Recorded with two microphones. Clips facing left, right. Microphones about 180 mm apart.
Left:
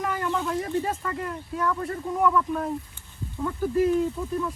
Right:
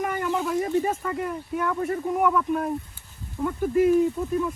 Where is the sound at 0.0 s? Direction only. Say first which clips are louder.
Right 2 dB; 5° right (ahead or behind).